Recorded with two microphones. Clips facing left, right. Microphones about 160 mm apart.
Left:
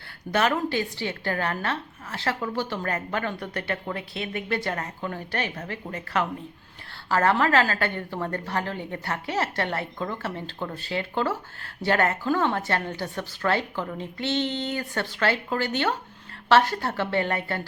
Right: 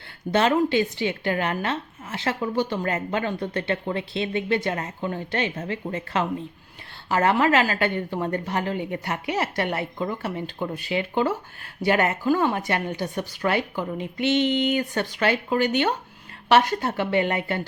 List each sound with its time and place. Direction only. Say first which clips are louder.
0.3 s a woman's voice: right 4 dB; 25° right (ahead or behind)